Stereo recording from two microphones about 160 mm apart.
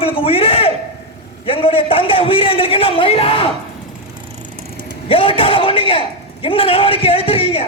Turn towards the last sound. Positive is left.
turn(degrees=35)  # may be behind; listen again after turning